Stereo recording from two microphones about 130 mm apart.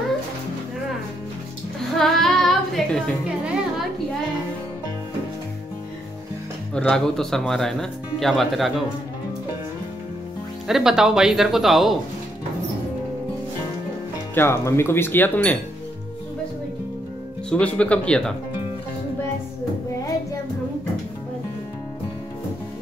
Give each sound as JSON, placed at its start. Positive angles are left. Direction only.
{"t": 2.0, "sound": "music", "side_deg": 0}
{"t": 6.7, "sound": "speech", "side_deg": 5}
{"t": 10.7, "sound": "speech", "side_deg": -5}
{"t": 14.3, "sound": "speech", "side_deg": 20}
{"t": 17.5, "sound": "speech", "side_deg": 10}